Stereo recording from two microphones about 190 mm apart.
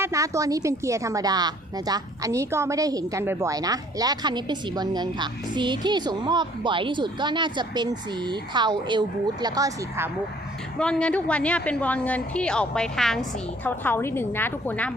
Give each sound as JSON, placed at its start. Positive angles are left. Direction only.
{"t": 0.0, "sound": "a woman's voice", "side_deg": -15}
{"t": 10.8, "sound": "a woman's voice", "side_deg": 5}